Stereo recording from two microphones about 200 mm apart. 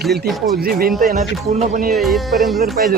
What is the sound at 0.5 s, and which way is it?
Speech, 50° right (ahead or behind).